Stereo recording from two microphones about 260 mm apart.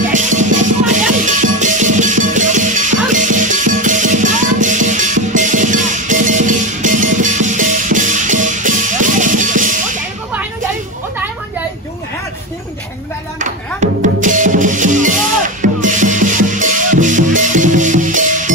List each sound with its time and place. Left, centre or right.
0.1 s music: right
13.4 s music: right